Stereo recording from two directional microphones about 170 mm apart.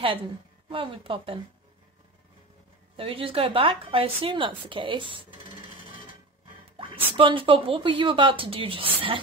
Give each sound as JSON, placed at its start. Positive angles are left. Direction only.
{"t": 0.7, "sound": "a woman's voice", "side_deg": -30}
{"t": 3.0, "sound": "a woman's voice", "side_deg": -30}